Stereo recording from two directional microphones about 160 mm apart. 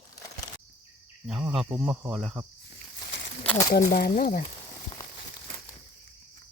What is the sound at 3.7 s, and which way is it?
Speech, 65° left (ahead or behind).